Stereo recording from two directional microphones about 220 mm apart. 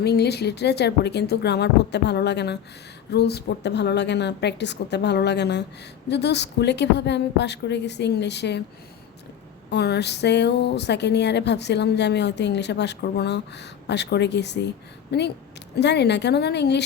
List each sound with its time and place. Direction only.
0.0 s speech: 50° left (ahead or behind)
9.6 s speech: 50° left (ahead or behind)